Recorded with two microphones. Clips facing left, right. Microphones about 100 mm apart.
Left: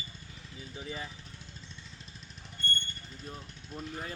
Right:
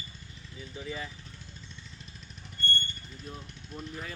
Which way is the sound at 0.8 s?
25° left (ahead or behind).